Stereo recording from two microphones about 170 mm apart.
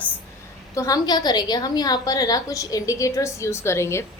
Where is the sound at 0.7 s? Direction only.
20° left (ahead or behind).